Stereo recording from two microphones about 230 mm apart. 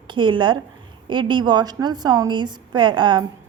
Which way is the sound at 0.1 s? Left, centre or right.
Right.